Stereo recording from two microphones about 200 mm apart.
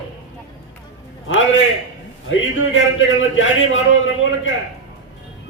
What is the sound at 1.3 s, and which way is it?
A man's voice, 75° left (ahead or behind).